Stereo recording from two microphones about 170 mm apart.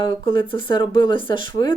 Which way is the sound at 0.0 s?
30° left (ahead or behind).